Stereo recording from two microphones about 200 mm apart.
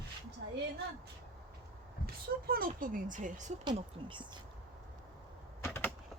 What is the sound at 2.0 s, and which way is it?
Speech, 45° right (ahead or behind).